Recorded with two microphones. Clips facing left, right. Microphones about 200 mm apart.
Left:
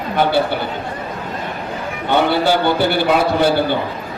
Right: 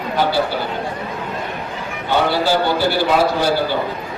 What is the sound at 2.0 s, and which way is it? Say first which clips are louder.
Speech: left 2 dB; 60° left (ahead or behind).